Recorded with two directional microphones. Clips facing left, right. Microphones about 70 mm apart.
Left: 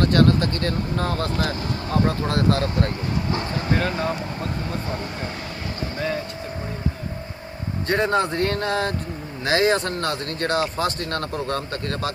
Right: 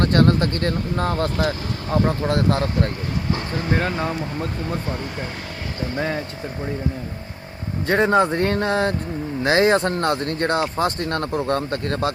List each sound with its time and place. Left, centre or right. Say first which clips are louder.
0.0 s speech: right 1 dB; right; by 3.7 s centre
3.7 s speech: right 1 dB; right
7.9 s speech: right 4 dB; centre